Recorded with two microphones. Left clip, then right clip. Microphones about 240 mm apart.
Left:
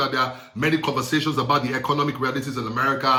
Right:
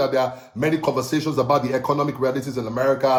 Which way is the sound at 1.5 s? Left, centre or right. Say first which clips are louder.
Right 2 dB; centre.